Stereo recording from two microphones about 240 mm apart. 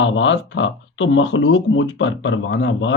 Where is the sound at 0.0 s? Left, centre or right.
Left.